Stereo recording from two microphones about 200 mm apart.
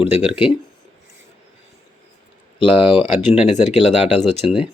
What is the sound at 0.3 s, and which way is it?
Speech, 25° left (ahead or behind).